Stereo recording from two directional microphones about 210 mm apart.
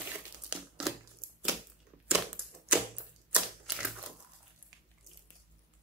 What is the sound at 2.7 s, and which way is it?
Typewriter, 5° right (ahead or behind).